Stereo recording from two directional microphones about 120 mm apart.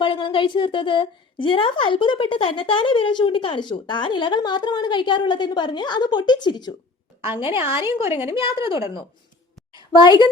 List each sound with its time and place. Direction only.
0.0 s a woman's voice: 45° left (ahead or behind)